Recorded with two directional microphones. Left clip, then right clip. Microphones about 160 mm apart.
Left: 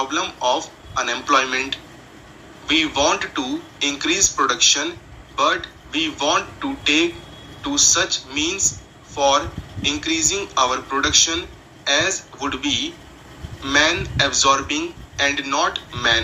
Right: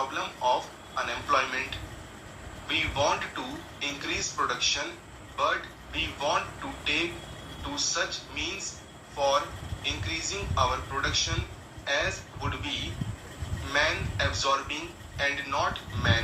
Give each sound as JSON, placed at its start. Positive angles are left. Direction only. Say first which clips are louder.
{"t": 0.1, "sound": "speech", "louder": "left 7 dB", "side_deg": 50}